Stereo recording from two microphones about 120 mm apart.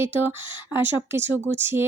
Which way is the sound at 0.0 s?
20° right (ahead or behind).